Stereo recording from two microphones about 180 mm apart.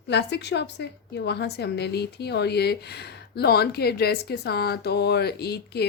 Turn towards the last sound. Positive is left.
turn(degrees=65)  # may be behind; listen again after turning